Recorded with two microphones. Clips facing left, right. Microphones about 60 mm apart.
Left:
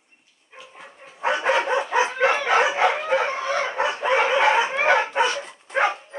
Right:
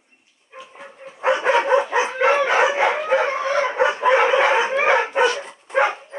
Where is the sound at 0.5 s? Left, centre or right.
Centre.